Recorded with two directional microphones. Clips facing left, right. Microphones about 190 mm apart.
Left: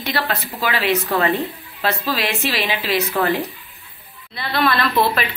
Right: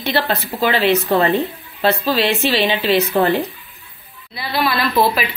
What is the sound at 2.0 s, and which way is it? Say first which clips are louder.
A woman's voice: right 5 dB; 30° right (ahead or behind).